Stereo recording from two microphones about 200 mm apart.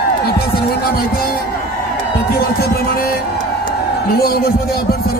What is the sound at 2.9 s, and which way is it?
Music, 50° left (ahead or behind).